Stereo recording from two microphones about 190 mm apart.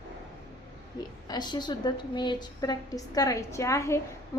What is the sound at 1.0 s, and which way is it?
A woman's voice, 20° left (ahead or behind).